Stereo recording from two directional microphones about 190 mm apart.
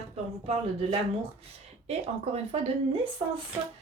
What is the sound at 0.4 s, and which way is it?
Speech, 35° right (ahead or behind).